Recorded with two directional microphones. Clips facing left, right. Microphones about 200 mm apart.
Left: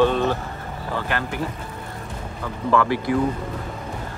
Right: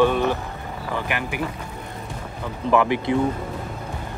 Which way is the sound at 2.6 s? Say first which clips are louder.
Right 1 dB; 20° right (ahead or behind).